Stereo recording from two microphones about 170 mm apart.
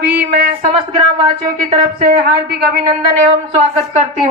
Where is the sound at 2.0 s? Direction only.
60° right (ahead or behind).